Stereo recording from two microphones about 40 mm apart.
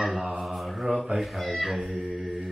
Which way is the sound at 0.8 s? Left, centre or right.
Centre.